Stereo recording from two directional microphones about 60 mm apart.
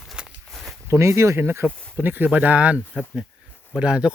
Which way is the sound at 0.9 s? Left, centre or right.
Right.